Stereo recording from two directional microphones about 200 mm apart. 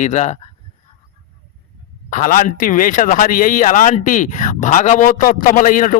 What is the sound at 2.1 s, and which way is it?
Speech, 40° left (ahead or behind).